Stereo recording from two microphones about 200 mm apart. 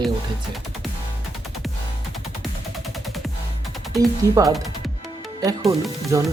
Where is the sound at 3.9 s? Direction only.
15° right (ahead or behind).